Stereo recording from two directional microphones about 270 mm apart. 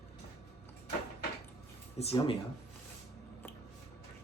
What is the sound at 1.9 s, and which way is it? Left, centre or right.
Speech, left.